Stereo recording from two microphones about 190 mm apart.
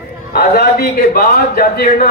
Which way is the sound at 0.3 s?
55° left (ahead or behind).